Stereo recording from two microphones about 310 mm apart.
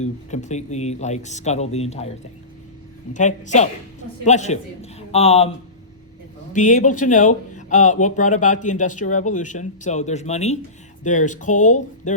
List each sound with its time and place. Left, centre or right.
0.0 s speech: left
3.1 s speech: left
6.5 s speech: left